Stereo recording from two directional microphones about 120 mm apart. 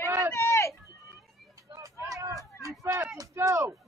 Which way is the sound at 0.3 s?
25° left (ahead or behind).